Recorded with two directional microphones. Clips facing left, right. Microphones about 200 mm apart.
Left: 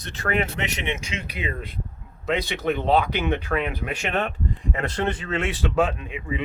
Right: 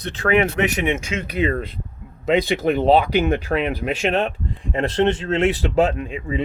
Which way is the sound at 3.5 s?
75° right (ahead or behind).